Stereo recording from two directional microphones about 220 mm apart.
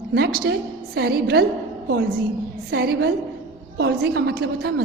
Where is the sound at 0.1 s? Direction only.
45° right (ahead or behind).